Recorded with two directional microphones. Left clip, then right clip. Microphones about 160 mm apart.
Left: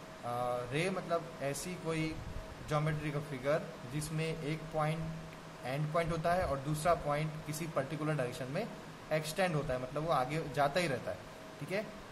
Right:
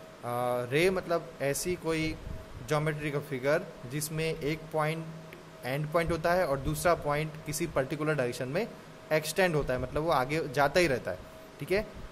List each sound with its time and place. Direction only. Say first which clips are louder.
0.3 s a man's voice: right 6 dB; 60° right (ahead or behind)